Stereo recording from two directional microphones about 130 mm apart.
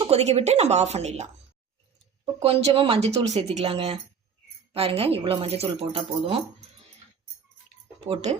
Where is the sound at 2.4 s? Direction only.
45° right (ahead or behind).